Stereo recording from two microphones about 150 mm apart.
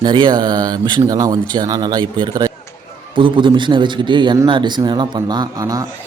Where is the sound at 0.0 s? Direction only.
30° right (ahead or behind).